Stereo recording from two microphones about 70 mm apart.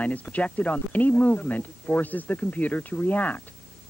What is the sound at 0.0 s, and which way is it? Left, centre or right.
Speech, left.